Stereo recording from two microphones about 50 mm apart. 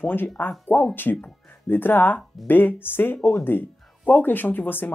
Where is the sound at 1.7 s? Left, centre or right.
Left.